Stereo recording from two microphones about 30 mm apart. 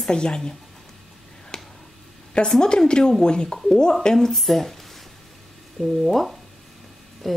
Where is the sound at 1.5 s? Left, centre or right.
Left.